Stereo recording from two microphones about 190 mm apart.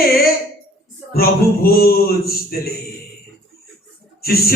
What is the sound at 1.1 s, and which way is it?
A man's voice, 55° left (ahead or behind).